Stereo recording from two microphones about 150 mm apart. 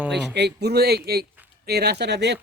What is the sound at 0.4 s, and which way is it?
Speech, 90° right.